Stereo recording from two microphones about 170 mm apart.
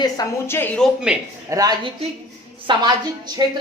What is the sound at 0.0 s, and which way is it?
Speech, 20° left (ahead or behind).